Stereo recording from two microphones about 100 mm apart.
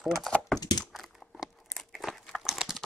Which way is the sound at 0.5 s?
45° left (ahead or behind).